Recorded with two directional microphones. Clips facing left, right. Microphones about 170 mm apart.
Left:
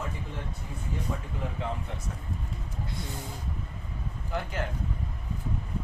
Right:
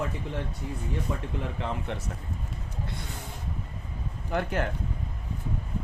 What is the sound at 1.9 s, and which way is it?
Speech, 75° right (ahead or behind).